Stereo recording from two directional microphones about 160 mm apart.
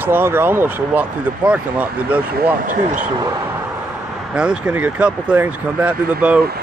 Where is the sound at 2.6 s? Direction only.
55° right (ahead or behind).